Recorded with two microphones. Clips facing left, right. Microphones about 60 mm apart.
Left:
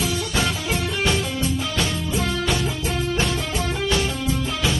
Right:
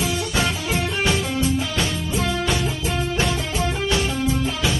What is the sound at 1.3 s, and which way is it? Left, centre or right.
Music, centre.